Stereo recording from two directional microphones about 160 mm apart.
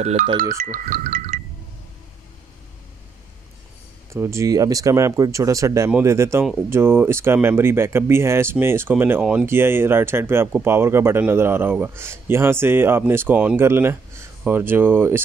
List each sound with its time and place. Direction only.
0.0 s speech: 50° right (ahead or behind)
4.1 s speech: 15° right (ahead or behind)